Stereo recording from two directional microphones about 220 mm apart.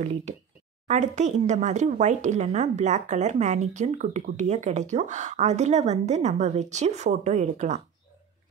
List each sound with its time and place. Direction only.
0.8 s speech: 35° right (ahead or behind)